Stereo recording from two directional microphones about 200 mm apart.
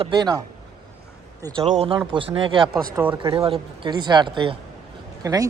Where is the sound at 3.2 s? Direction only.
25° right (ahead or behind).